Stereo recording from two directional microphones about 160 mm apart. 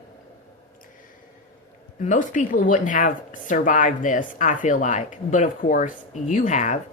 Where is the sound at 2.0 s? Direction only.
55° left (ahead or behind).